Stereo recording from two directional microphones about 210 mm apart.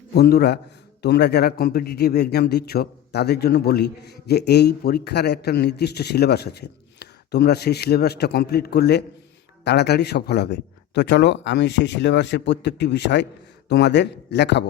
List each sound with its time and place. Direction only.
0.1 s a man's voice: 50° left (ahead or behind)